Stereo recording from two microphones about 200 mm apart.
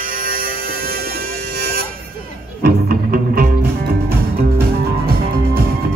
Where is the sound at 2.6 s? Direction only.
45° right (ahead or behind).